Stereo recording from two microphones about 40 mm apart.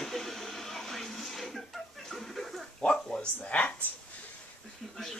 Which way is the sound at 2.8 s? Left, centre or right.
Left.